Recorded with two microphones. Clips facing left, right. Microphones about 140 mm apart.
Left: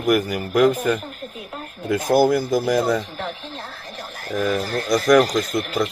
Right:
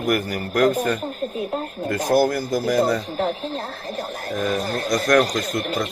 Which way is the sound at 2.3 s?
5° left (ahead or behind).